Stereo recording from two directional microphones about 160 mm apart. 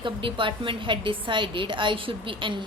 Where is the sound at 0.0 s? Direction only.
30° right (ahead or behind).